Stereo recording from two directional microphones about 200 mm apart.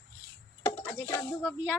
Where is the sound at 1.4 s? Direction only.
5° right (ahead or behind).